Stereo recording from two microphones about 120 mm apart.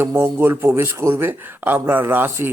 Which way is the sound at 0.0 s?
20° right (ahead or behind).